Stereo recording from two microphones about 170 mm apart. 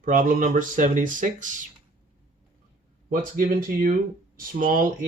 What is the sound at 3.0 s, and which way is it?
Speech, 55° right (ahead or behind).